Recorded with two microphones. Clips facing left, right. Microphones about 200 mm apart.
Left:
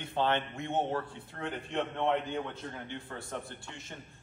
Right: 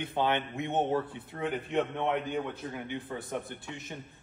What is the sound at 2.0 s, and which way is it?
Speech, 5° right (ahead or behind).